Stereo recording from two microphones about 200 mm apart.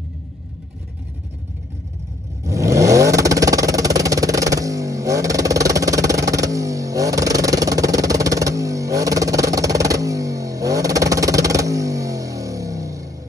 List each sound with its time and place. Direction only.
2.4 s vehicle: 15° right (ahead or behind)